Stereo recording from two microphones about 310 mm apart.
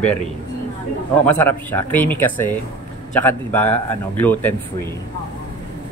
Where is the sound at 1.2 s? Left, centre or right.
Centre.